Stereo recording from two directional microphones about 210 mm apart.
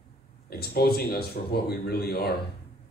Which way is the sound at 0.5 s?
45° left (ahead or behind).